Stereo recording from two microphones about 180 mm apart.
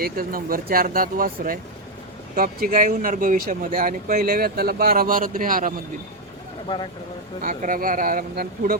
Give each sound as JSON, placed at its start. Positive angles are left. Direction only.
{"t": 0.0, "sound": "speech", "side_deg": -55}
{"t": 7.4, "sound": "speech", "side_deg": -50}